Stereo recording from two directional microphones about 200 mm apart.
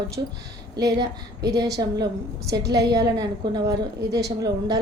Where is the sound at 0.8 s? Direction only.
20° right (ahead or behind).